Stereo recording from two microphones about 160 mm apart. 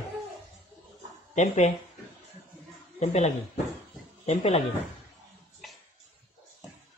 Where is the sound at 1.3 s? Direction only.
50° left (ahead or behind).